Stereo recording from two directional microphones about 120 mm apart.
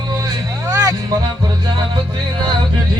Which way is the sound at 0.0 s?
30° right (ahead or behind).